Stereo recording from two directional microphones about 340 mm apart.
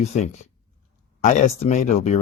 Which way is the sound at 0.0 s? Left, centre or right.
Centre.